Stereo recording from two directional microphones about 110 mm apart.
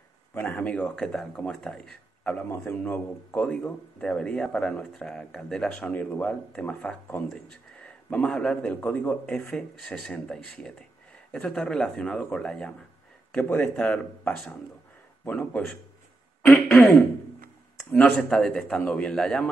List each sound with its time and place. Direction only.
0.3 s speech: 15° left (ahead or behind)
16.4 s throat clearing: 5° left (ahead or behind)
17.7 s speech: 15° left (ahead or behind)